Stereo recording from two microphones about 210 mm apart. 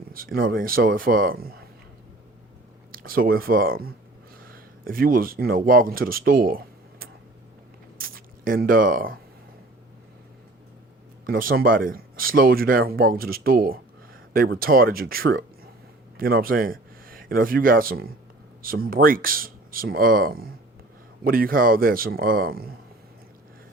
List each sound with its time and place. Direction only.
0.1 s speech: 45° right (ahead or behind)
2.9 s speech: 45° right (ahead or behind)
7.9 s a sound: 45° right (ahead or behind)
11.3 s speech: 45° right (ahead or behind)